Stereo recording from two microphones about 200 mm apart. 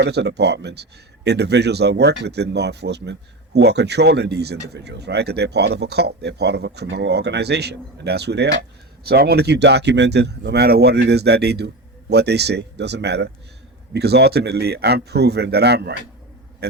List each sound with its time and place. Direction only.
0.0 s speech: 55° right (ahead or behind)